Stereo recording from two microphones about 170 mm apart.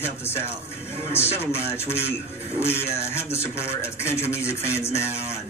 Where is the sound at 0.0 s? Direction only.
15° left (ahead or behind).